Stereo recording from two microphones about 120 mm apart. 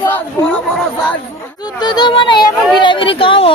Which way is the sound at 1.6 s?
35° left (ahead or behind).